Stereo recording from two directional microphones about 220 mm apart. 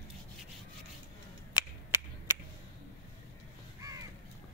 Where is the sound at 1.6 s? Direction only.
20° left (ahead or behind).